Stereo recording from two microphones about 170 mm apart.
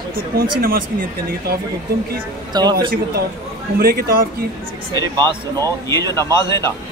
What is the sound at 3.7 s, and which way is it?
Speech, 65° right (ahead or behind).